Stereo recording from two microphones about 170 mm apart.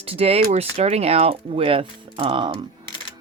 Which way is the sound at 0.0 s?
35° right (ahead or behind).